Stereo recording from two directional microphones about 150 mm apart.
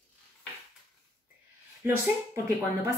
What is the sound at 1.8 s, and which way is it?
Speech, 15° right (ahead or behind).